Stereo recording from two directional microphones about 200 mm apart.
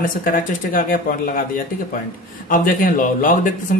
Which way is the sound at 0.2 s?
45° left (ahead or behind).